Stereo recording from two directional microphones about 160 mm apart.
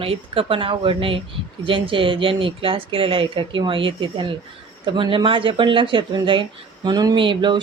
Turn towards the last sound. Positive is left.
turn(degrees=-30)  # may be behind; listen again after turning